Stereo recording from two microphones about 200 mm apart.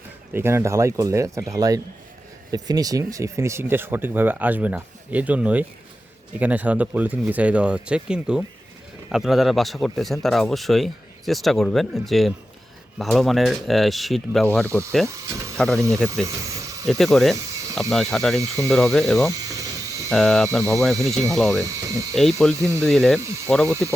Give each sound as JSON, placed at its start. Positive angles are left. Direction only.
{"t": 0.3, "sound": "speech", "side_deg": -10}
{"t": 14.7, "sound": "speech", "side_deg": -15}
{"t": 15.5, "sound": "speech", "side_deg": 5}
{"t": 16.2, "sound": "snake", "side_deg": -15}
{"t": 16.8, "sound": "speech", "side_deg": 0}
{"t": 19.3, "sound": "a sound", "side_deg": -15}
{"t": 20.1, "sound": "speech", "side_deg": 0}
{"t": 21.6, "sound": "speech", "side_deg": -15}
{"t": 22.1, "sound": "speech", "side_deg": 0}
{"t": 22.5, "sound": "speech", "side_deg": -15}
{"t": 22.8, "sound": "speech", "side_deg": 0}